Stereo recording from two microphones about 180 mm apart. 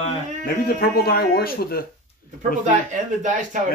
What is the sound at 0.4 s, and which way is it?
Speech, 55° left (ahead or behind).